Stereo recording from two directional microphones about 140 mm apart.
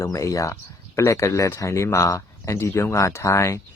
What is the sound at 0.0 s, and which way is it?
Speech, 20° left (ahead or behind).